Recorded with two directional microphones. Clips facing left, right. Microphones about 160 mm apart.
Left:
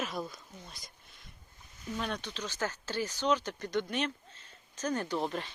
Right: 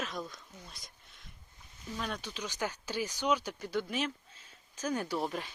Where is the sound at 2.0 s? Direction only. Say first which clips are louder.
Left 1 dB; 5° right (ahead or behind).